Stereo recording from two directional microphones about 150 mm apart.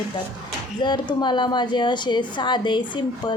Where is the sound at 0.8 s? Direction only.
30° left (ahead or behind).